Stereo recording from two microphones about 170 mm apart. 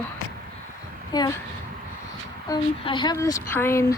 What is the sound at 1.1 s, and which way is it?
Speech, 25° left (ahead or behind).